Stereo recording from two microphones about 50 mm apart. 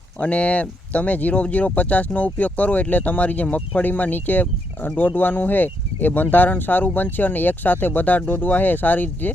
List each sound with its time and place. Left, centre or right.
0.2 s speech: left